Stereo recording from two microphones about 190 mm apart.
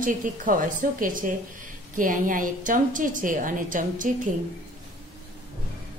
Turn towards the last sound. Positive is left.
turn(degrees=-45)  # may be behind; listen again after turning